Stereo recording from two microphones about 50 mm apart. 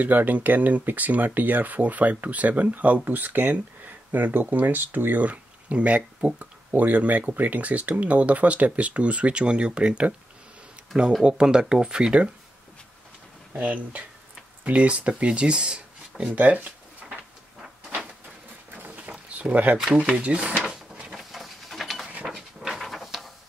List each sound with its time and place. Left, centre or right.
0.0 s speech: right
11.2 s speech: centre
13.6 s speech: right
16.3 s speech: right
18.8 s a sound: right
19.5 s speech: right
20.6 s drawer open or close: centre
21.2 s a sound: centre
22.6 s dog: centre